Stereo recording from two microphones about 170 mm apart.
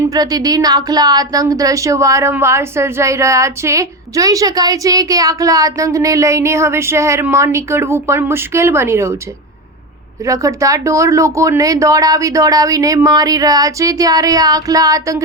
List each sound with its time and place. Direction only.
0.0 s a woman's voice: 20° right (ahead or behind)
10.2 s a woman's voice: 20° right (ahead or behind)